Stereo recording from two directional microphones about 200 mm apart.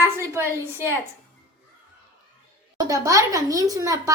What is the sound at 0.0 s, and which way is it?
Speech, 10° right (ahead or behind).